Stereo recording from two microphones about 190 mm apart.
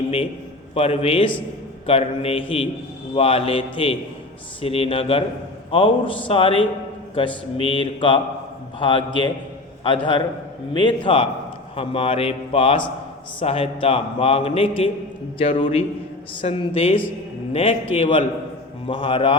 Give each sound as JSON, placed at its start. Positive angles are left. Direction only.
{"t": 0.7, "sound": "mantra", "side_deg": 30}
{"t": 1.9, "sound": "a man's voice", "side_deg": 30}
{"t": 3.2, "sound": "mantra", "side_deg": 30}
{"t": 4.6, "sound": "a man's voice", "side_deg": 30}
{"t": 5.7, "sound": "mantra", "side_deg": 25}
{"t": 13.4, "sound": "a man's voice", "side_deg": 30}
{"t": 15.4, "sound": "mantra", "side_deg": 30}